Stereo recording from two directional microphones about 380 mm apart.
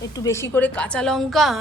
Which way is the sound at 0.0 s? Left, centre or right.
Centre.